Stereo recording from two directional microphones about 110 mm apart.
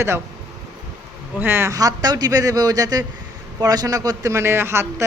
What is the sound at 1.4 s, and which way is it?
A man's voice, 20° right (ahead or behind).